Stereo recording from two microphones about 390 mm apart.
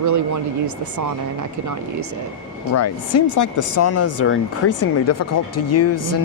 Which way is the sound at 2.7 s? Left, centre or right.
Left.